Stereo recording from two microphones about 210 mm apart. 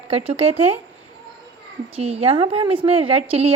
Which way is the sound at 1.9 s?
30° right (ahead or behind).